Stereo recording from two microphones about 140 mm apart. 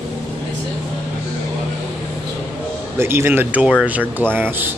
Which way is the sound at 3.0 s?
15° right (ahead or behind).